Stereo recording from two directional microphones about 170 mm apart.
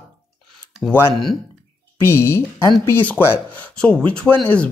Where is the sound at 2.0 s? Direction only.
15° left (ahead or behind).